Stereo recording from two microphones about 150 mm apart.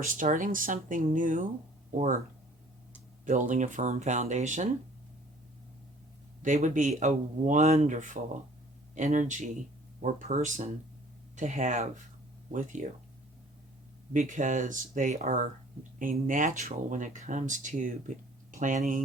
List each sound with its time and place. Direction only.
0.1 s speech: 60° right (ahead or behind)
3.2 s speech: 55° right (ahead or behind)
6.4 s speech: 55° right (ahead or behind)
14.1 s speech: 55° right (ahead or behind)